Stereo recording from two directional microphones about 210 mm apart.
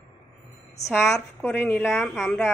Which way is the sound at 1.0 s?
10° left (ahead or behind).